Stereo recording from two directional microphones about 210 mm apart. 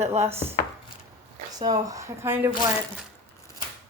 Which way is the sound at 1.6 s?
15° right (ahead or behind).